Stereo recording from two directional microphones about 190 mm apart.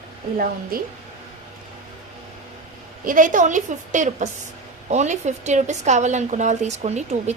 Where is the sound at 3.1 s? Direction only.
45° right (ahead or behind).